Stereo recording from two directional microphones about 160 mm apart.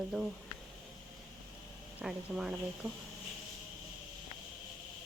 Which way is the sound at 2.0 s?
5° right (ahead or behind).